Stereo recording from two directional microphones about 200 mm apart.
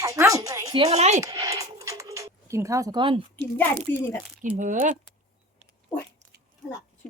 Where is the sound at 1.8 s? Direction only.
15° right (ahead or behind).